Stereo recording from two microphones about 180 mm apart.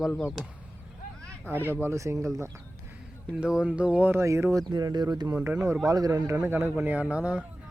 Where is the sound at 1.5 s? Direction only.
10° right (ahead or behind).